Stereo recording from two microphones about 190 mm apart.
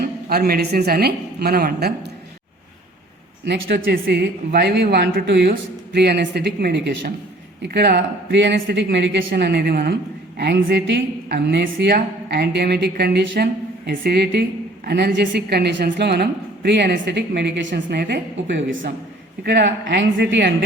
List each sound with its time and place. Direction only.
0.0 s speech: 55° right (ahead or behind)
3.4 s a woman's voice: 65° right (ahead or behind)
19.5 s a woman's voice: 65° right (ahead or behind)